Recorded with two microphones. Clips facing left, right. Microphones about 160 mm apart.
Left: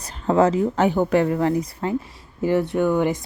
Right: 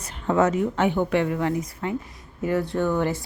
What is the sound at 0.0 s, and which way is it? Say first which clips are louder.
Speech: left 3 dB; 35° left (ahead or behind).